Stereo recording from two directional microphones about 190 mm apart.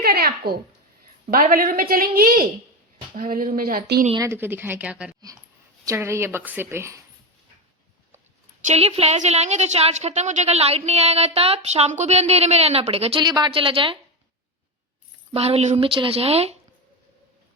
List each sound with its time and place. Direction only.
0.0 s a sound: 55° right (ahead or behind)
1.3 s a woman's voice: 45° right (ahead or behind)
4.2 s a woman's voice: 10° right (ahead or behind)
8.6 s a woman's voice: 35° right (ahead or behind)
15.3 s a woman's voice: 30° right (ahead or behind)